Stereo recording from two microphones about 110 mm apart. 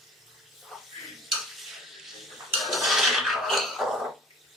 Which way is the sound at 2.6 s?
Centre (ahead or behind).